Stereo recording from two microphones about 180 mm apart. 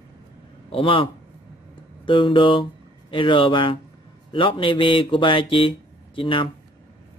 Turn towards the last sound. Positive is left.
turn(degrees=30)  # may be behind; listen again after turning